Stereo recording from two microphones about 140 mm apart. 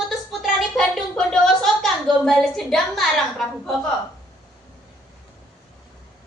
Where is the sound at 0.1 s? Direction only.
Centre (ahead or behind).